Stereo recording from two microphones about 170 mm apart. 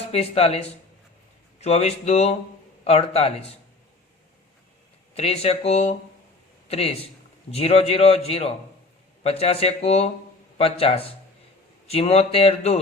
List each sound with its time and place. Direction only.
0.1 s a man's voice: 35° left (ahead or behind)
1.6 s a man's voice: 40° left (ahead or behind)
5.1 s a man's voice: 35° left (ahead or behind)